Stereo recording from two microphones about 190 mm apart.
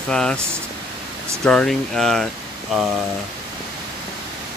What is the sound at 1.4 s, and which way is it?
Speech, 5° left (ahead or behind).